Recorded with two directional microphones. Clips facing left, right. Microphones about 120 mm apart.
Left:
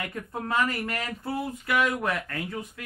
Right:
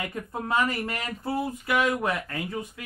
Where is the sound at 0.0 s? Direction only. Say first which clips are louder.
Right 1 dB; 20° right (ahead or behind).